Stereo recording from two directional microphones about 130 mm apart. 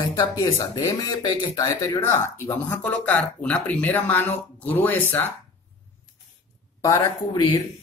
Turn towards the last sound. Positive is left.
turn(degrees=30)  # may be behind; listen again after turning